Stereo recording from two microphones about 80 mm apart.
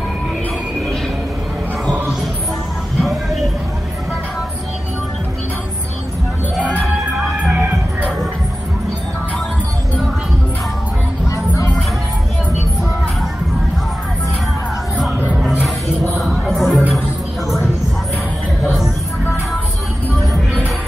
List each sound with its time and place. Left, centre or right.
3.0 s a sound: centre
6.6 s music: centre
11.3 s music: left
16.2 s music: centre